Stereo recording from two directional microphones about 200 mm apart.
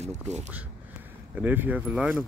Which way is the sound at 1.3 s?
10° right (ahead or behind).